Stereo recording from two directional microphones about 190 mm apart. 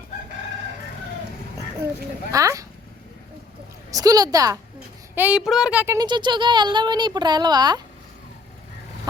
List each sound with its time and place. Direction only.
2.3 s speech: 15° right (ahead or behind)
3.9 s speech: 20° right (ahead or behind)
5.1 s speech: 5° right (ahead or behind)